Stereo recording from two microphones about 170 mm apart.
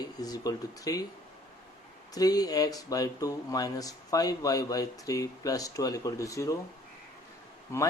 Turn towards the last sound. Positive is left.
turn(degrees=15)  # may be behind; listen again after turning